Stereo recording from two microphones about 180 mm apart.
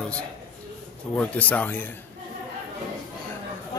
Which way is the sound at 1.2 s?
10° left (ahead or behind).